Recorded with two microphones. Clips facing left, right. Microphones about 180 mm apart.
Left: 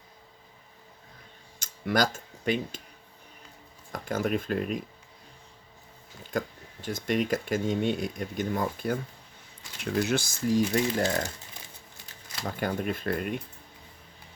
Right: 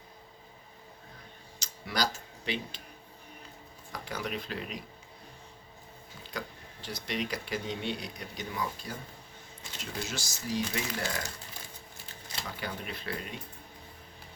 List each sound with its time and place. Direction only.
1.5 s tick-tock: 50° left (ahead or behind)
3.9 s speech: 50° left (ahead or behind)
6.3 s speech: 50° left (ahead or behind)
10.0 s speech: 55° left (ahead or behind)
12.5 s speech: 50° left (ahead or behind)